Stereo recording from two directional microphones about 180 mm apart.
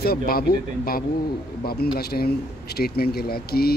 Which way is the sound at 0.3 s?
55° left (ahead or behind).